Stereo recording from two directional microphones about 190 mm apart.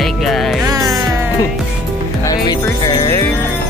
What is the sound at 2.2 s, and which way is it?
Music, 20° left (ahead or behind).